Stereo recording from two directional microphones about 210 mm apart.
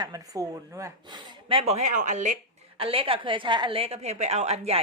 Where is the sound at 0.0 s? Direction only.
15° right (ahead or behind).